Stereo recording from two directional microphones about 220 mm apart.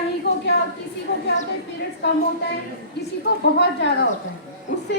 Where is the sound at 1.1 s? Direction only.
50° left (ahead or behind).